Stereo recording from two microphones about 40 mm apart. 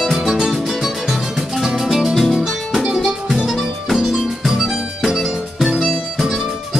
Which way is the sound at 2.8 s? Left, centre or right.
Right.